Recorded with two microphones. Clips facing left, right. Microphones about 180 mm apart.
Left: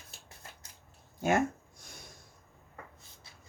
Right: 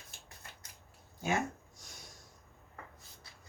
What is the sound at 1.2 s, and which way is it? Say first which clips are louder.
Speech: left 6 dB; 60° left (ahead or behind).